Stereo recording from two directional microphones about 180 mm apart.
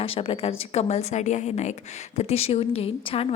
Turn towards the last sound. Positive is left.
turn(degrees=30)  # may be behind; listen again after turning